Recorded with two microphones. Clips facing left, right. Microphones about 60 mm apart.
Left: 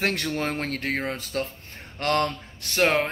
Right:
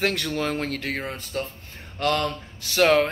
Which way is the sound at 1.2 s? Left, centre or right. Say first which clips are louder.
Left 1 dB; left.